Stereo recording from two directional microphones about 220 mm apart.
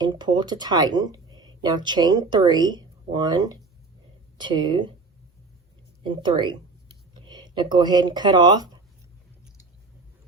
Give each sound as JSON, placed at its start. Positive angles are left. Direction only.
{"t": 0.0, "sound": "speech", "side_deg": -20}
{"t": 6.0, "sound": "a sound", "side_deg": -20}
{"t": 7.5, "sound": "speech", "side_deg": -20}